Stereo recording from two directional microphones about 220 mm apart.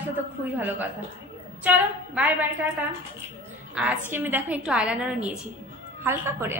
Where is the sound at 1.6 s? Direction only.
5° right (ahead or behind).